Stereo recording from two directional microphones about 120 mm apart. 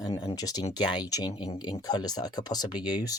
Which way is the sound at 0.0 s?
30° left (ahead or behind).